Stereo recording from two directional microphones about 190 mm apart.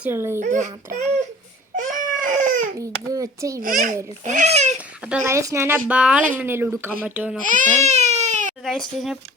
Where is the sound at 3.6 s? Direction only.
45° right (ahead or behind).